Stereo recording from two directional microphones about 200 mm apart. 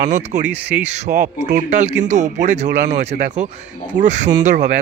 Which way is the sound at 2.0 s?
35° right (ahead or behind).